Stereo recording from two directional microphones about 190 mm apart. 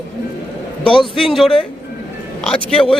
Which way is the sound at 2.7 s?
30° left (ahead or behind).